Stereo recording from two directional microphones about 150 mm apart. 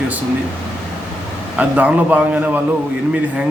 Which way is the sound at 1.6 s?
10° right (ahead or behind).